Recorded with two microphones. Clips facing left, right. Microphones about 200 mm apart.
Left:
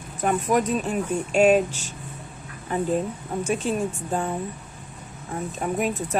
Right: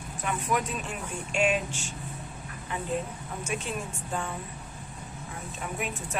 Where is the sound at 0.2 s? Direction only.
45° left (ahead or behind).